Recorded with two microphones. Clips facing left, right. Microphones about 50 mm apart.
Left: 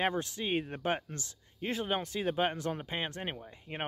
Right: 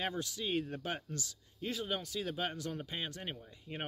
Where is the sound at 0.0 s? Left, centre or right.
Left.